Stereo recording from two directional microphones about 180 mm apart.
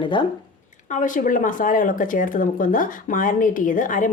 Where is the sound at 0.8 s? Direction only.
45° left (ahead or behind).